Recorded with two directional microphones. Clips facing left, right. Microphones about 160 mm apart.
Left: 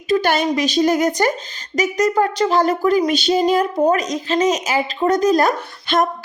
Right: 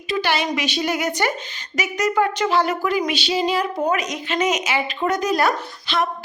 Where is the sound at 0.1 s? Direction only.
45° left (ahead or behind).